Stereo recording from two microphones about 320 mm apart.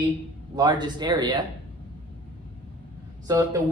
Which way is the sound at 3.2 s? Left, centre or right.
Centre.